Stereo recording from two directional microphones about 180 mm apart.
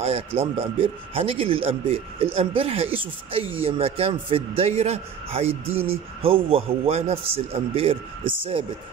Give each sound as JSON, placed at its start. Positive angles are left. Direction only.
{"t": 0.4, "sound": "a man's voice", "side_deg": -30}